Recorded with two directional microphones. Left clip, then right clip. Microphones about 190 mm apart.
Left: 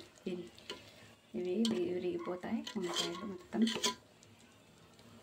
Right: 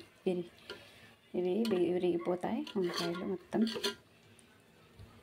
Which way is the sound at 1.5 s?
25° right (ahead or behind).